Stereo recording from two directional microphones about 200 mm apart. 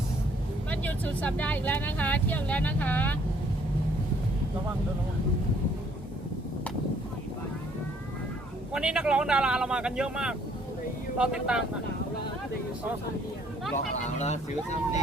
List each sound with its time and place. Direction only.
0.7 s speech: 10° left (ahead or behind)
8.7 s speech: 5° right (ahead or behind)
14.2 s speech: 35° left (ahead or behind)